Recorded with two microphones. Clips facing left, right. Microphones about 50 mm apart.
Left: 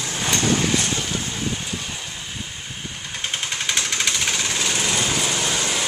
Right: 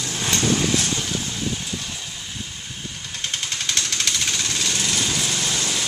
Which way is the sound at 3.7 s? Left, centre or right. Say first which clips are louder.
Left 1 dB; centre.